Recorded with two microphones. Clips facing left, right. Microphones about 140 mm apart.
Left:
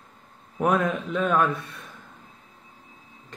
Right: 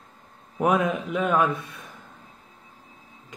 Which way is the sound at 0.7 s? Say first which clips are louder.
Right 1 dB; 15° right (ahead or behind).